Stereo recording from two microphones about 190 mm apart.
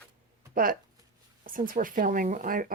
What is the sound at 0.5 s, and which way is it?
Speech, 45° right (ahead or behind).